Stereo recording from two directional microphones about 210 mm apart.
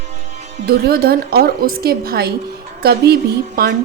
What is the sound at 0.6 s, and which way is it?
A woman's voice, 45° right (ahead or behind).